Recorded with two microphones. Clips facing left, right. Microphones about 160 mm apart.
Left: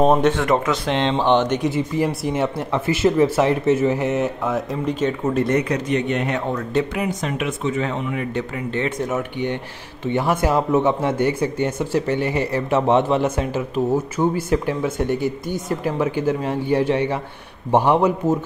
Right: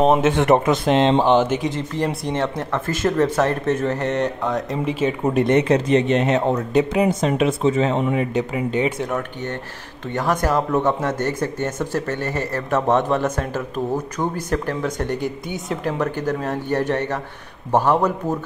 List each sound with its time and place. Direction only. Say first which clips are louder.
0.0 s speech: even; 15° right (ahead or behind)
0.7 s speech: right 4 dB; 45° right (ahead or behind)
1.2 s speech: right 1 dB; 5° right (ahead or behind)
1.7 s speech: left 2 dB; 10° left (ahead or behind)
5.3 s speech: right 6 dB; 20° right (ahead or behind)
10.1 s speech: left 1 dB; 10° left (ahead or behind)